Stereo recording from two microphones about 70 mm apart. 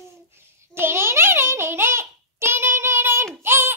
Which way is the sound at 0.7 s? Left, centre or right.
Right.